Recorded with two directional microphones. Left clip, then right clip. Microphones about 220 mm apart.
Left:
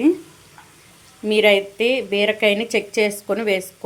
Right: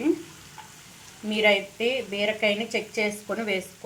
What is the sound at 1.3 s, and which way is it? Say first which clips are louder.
A woman's voice: left 7 dB; 45° left (ahead or behind).